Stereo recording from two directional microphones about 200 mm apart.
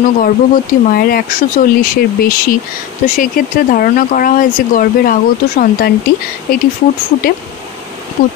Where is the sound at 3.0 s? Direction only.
40° left (ahead or behind).